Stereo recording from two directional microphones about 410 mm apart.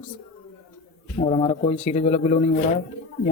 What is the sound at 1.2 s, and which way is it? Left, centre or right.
A man's voice, centre.